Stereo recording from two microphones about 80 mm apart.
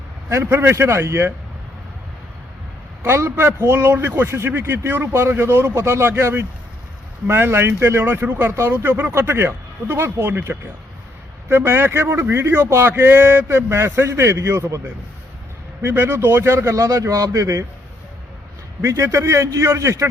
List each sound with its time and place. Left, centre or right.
0.3 s a man's voice: right
3.0 s a man's voice: right
15.8 s a man's voice: right
16.7 s speech: right
18.8 s a man's voice: right